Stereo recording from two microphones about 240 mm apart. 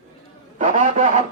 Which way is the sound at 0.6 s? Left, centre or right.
Right.